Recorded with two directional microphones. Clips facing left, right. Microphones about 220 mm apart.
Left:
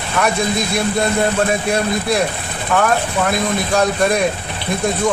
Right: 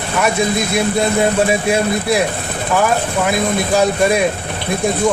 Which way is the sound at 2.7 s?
5° right (ahead or behind).